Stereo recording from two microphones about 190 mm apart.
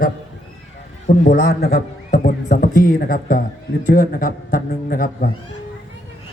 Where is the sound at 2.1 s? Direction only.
40° left (ahead or behind).